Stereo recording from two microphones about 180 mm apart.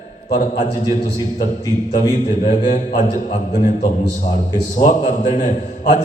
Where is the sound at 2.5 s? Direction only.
40° left (ahead or behind).